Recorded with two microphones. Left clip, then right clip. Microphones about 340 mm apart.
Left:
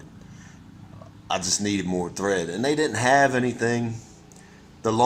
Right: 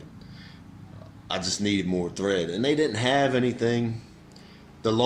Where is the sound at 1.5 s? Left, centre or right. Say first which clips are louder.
Even; left.